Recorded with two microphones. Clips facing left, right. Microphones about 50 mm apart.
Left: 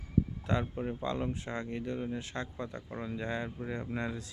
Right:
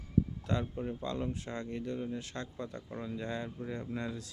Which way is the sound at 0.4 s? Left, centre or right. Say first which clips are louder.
Left 2 dB; left.